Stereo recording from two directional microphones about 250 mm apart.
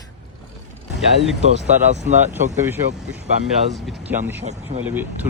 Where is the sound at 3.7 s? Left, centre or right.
Centre.